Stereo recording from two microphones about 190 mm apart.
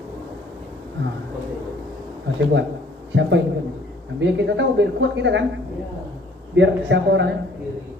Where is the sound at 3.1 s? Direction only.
70° right (ahead or behind).